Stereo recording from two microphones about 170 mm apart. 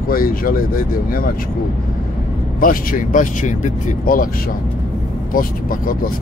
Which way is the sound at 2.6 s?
55° left (ahead or behind).